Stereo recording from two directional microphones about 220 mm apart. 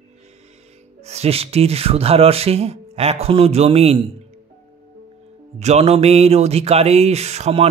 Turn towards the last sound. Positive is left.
turn(degrees=-30)  # may be behind; listen again after turning